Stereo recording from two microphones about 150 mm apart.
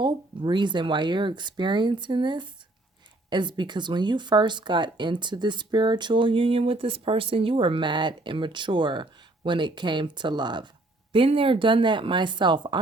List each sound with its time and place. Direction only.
0.0 s speech: 30° right (ahead or behind)